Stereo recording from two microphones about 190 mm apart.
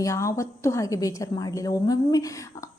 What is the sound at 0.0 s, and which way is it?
A woman's voice, 15° left (ahead or behind).